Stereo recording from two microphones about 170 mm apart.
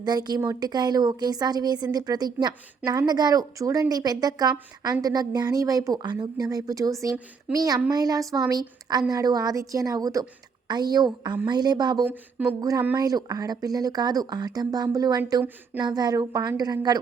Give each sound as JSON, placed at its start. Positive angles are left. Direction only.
{"t": 0.0, "sound": "speech", "side_deg": -25}